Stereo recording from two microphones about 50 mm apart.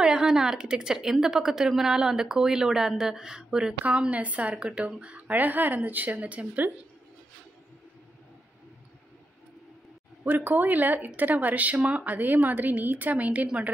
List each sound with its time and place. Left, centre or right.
0.0 s speech: centre
3.8 s a woman's voice: right
10.2 s a woman's voice: right